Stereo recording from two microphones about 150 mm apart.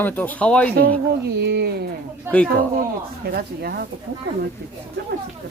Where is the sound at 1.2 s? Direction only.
90° right.